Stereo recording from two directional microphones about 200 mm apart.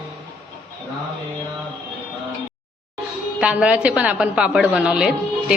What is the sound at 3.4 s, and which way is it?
A woman's voice, 5° right (ahead or behind).